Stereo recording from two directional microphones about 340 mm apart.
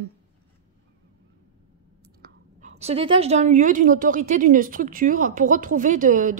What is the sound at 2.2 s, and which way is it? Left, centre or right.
Speech, right.